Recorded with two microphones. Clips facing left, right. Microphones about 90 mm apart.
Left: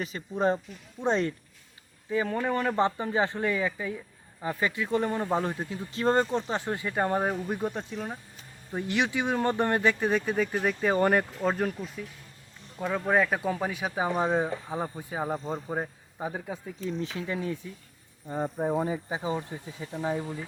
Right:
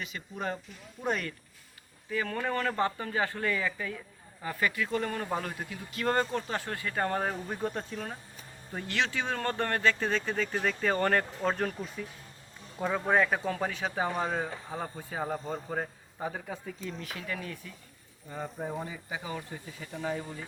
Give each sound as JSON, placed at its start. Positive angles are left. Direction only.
{"t": 0.0, "sound": "speech", "side_deg": 35}
{"t": 17.0, "sound": "speech", "side_deg": 25}
{"t": 18.3, "sound": "speech", "side_deg": 30}